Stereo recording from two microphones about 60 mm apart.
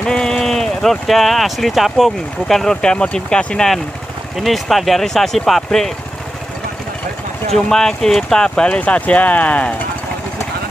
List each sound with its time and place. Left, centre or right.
0.0 s speech: centre
7.5 s speech: centre